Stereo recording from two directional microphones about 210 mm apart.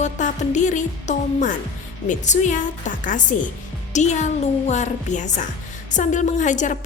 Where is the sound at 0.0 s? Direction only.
35° left (ahead or behind).